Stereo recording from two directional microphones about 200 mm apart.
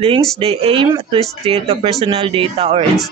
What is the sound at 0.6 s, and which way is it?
Speech, 25° right (ahead or behind).